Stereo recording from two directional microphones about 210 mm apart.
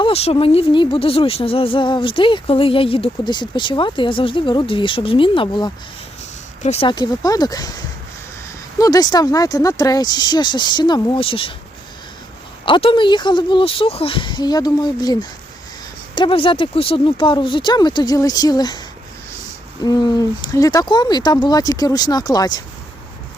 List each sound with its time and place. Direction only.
0.0 s speech: 30° left (ahead or behind)
8.8 s speech: 15° left (ahead or behind)
12.6 s speech: 25° left (ahead or behind)
19.8 s speech: 20° left (ahead or behind)